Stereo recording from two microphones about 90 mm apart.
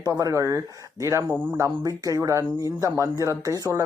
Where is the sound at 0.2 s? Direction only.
35° right (ahead or behind).